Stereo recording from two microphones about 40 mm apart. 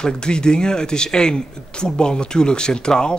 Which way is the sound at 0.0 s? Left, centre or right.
Left.